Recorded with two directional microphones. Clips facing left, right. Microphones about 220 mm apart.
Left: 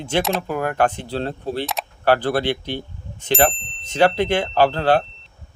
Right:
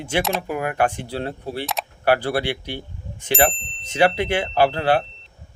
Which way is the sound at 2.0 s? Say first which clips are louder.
Left 2 dB; 10° right (ahead or behind).